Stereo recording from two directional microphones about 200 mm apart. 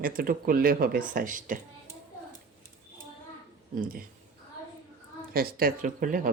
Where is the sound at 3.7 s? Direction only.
45° right (ahead or behind).